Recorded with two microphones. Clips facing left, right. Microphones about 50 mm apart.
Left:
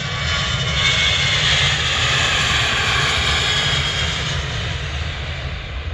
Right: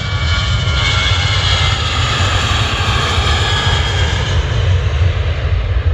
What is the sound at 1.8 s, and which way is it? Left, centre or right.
Vehicle, centre.